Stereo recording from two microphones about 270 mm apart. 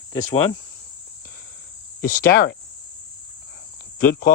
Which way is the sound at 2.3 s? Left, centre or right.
Left.